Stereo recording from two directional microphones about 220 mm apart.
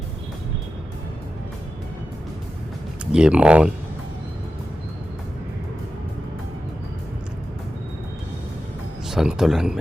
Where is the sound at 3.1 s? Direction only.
5° right (ahead or behind).